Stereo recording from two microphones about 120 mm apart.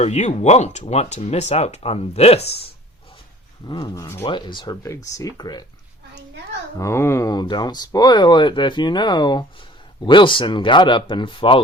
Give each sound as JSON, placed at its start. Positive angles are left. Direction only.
{"t": 0.0, "sound": "speech", "side_deg": 75}
{"t": 3.7, "sound": "speech", "side_deg": 30}
{"t": 4.2, "sound": "speech", "side_deg": 45}
{"t": 4.6, "sound": "speech", "side_deg": 30}
{"t": 6.7, "sound": "speech", "side_deg": 20}
{"t": 7.4, "sound": "speech", "side_deg": 40}